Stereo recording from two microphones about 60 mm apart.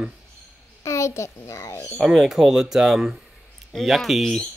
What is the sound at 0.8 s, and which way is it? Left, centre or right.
A child's voice, left.